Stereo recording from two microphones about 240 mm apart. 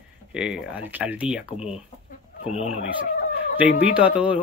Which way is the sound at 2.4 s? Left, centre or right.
Left.